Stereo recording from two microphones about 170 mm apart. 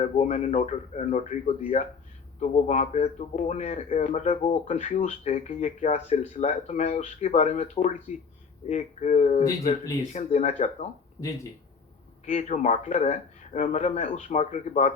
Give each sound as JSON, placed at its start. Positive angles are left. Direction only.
{"t": 0.0, "sound": "a man's voice", "side_deg": 40}
{"t": 12.2, "sound": "speech", "side_deg": 45}